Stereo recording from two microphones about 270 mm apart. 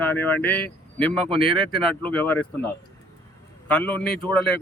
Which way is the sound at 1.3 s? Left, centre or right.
Centre.